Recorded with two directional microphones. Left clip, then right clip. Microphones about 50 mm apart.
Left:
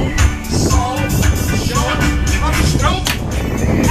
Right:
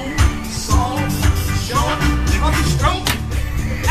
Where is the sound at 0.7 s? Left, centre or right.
Left.